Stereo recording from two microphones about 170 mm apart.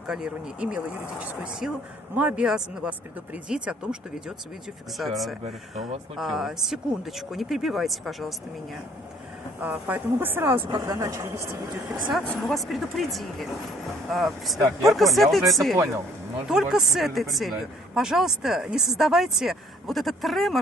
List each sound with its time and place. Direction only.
0.0 s speech: 5° right (ahead or behind)
9.6 s speech: 10° right (ahead or behind)
10.7 s a woman's voice: 25° right (ahead or behind)
12.1 s speech: centre (ahead or behind)